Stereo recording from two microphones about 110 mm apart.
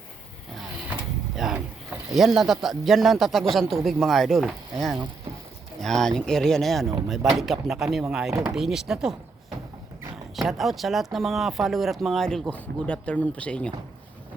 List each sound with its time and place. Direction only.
1.4 s boat: 5° right (ahead or behind)
2.1 s speech: centre (ahead or behind)
10.3 s speech: centre (ahead or behind)